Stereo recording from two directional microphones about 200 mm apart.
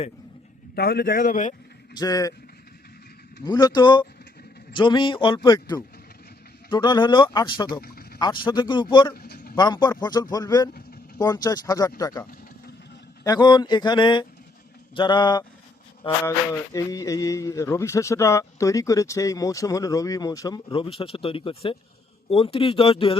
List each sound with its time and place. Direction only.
0.8 s speech: 50° left (ahead or behind)
2.0 s speech: 15° left (ahead or behind)
3.4 s speech: 20° left (ahead or behind)
7.8 s a sound: 50° left (ahead or behind)
8.2 s speech: 20° left (ahead or behind)
9.1 s vehicle: 50° left (ahead or behind)
9.6 s speech: 20° left (ahead or behind)
13.2 s speech: 20° left (ahead or behind)